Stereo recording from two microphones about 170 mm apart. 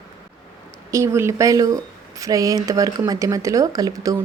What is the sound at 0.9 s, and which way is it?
Speech, 15° right (ahead or behind).